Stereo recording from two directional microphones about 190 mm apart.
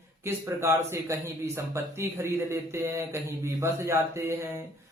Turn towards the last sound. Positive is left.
turn(degrees=-15)  # may be behind; listen again after turning